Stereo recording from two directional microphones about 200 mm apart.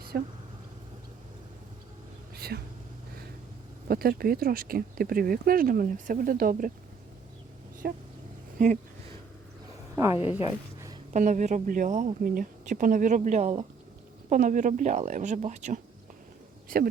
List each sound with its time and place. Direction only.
0.1 s speech: 50° right (ahead or behind)
2.3 s a sound: 50° right (ahead or behind)
3.8 s speech: 50° right (ahead or behind)
7.8 s speech: 50° right (ahead or behind)
9.9 s speech: 15° right (ahead or behind)
11.1 s speech: 40° right (ahead or behind)